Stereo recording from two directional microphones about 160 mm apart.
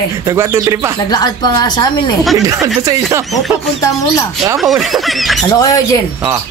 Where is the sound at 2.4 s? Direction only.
20° right (ahead or behind).